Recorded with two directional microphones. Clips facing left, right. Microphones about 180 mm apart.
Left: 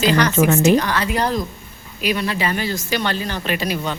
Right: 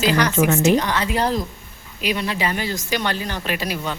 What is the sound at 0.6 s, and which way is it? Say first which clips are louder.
A woman's voice: left 2 dB; 20° right (ahead or behind).